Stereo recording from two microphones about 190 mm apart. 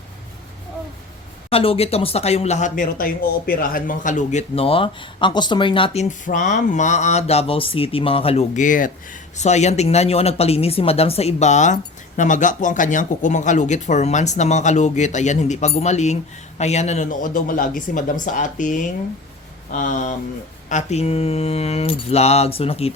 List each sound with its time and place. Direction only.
1.5 s speech: 30° left (ahead or behind)